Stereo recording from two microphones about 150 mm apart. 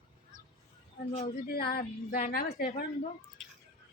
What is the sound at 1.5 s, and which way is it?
A woman's voice, 90° left.